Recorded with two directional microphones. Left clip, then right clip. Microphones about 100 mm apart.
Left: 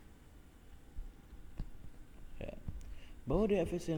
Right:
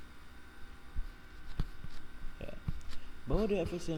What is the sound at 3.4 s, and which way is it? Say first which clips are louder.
Speech: left 1 dB; 10° left (ahead or behind).